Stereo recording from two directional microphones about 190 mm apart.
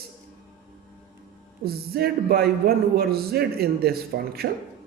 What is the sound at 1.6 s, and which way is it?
A man's voice, 55° right (ahead or behind).